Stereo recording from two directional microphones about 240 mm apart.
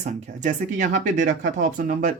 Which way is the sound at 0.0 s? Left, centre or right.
Right.